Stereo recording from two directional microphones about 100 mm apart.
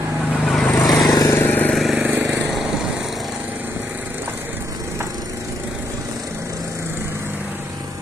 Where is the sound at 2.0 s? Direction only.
15° right (ahead or behind).